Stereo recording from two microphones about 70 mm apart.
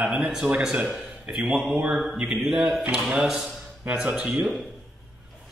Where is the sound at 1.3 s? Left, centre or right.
Centre.